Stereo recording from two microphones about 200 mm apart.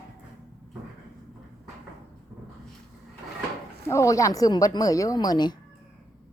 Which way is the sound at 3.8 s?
15° left (ahead or behind).